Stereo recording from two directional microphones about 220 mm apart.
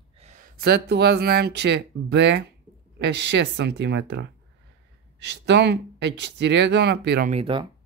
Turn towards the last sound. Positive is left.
turn(degrees=-25)  # may be behind; listen again after turning